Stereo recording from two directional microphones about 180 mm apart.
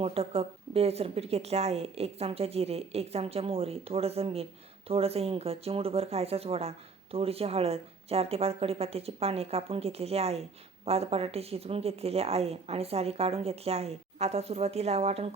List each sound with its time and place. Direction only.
0.0 s speech: 35° right (ahead or behind)